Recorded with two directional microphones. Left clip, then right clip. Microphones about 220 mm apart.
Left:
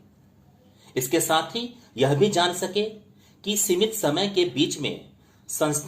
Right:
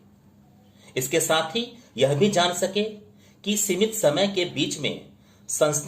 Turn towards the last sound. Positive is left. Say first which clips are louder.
# right 3 dB
turn(degrees=30)  # may be behind; listen again after turning